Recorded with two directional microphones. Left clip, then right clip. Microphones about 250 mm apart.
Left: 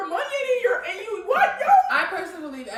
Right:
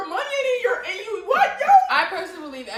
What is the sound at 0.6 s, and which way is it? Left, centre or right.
Whimper, centre.